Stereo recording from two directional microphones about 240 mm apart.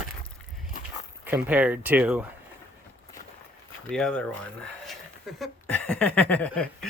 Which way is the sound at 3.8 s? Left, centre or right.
Centre.